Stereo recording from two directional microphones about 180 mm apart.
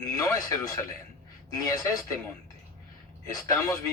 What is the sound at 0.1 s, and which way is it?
Speech, 20° left (ahead or behind).